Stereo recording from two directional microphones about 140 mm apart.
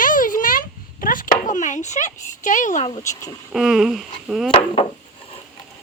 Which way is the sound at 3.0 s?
20° left (ahead or behind).